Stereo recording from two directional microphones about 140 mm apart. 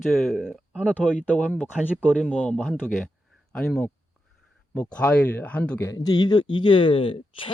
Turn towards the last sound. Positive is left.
turn(degrees=40)  # may be behind; listen again after turning